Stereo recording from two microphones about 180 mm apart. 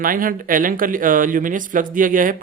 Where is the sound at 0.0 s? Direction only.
50° right (ahead or behind).